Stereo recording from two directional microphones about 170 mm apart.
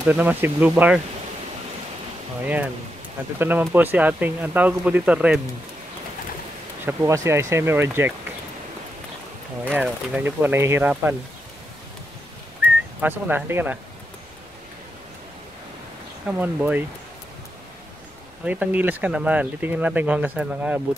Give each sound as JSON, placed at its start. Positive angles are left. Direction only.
{"t": 0.1, "sound": "speech", "side_deg": -10}
{"t": 2.4, "sound": "speech", "side_deg": -10}
{"t": 6.9, "sound": "speech", "side_deg": -15}
{"t": 9.8, "sound": "speech", "side_deg": -10}
{"t": 13.0, "sound": "speech", "side_deg": -10}
{"t": 16.3, "sound": "speech", "side_deg": -10}
{"t": 18.4, "sound": "speech", "side_deg": -10}